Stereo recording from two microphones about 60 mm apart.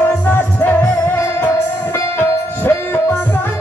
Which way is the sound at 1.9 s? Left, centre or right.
Left.